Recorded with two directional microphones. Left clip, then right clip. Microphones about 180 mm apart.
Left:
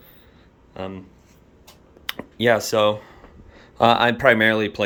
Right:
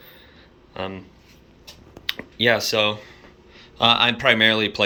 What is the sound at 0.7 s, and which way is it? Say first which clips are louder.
Speech: right 2 dB; 10° left (ahead or behind).